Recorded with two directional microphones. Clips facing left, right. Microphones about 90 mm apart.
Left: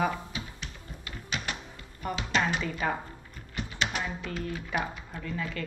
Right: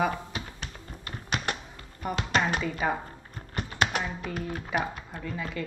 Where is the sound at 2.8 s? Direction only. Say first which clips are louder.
Right 2 dB; 10° right (ahead or behind).